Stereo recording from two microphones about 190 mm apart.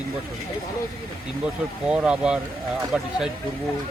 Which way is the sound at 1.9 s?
5° right (ahead or behind).